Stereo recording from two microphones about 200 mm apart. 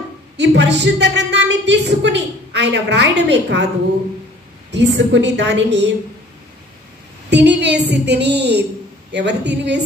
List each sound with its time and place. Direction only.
0.4 s a woman's voice: 60° right (ahead or behind)
4.6 s a woman's voice: 60° right (ahead or behind)
7.2 s a woman's voice: 60° right (ahead or behind)